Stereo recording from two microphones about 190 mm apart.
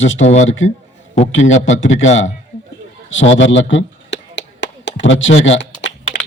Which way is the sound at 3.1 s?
85° left.